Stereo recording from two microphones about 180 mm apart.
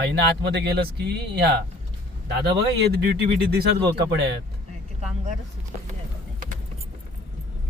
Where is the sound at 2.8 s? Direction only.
65° right (ahead or behind).